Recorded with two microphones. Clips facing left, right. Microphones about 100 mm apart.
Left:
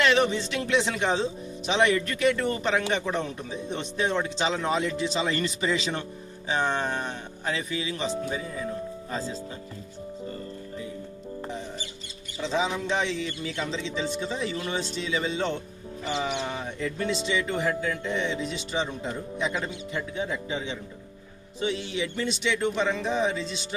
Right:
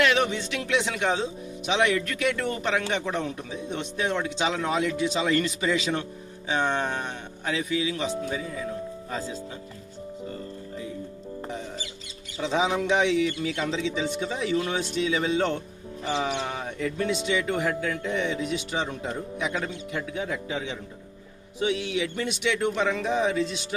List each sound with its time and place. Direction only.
0.0 s speech: 5° right (ahead or behind)
12.4 s speech: 15° right (ahead or behind)
12.6 s speech: 60° right (ahead or behind)
13.6 s speech: 10° right (ahead or behind)
21.9 s speech: 5° right (ahead or behind)